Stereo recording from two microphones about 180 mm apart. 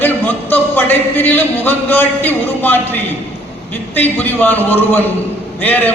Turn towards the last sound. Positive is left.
turn(degrees=10)  # may be behind; listen again after turning